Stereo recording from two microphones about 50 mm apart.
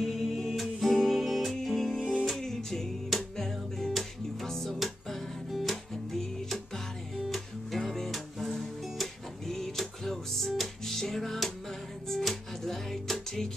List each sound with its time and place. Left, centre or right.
0.0 s music: centre
2.0 s music: centre
2.2 s music: centre